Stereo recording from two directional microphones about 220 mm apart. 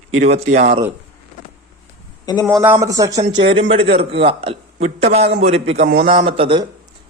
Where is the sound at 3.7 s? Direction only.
25° right (ahead or behind).